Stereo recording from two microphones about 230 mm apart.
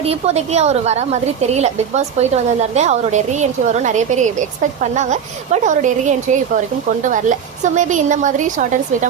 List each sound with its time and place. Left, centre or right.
0.0 s a woman's voice: right